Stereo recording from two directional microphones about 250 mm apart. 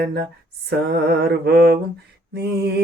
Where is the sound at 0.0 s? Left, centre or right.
Right.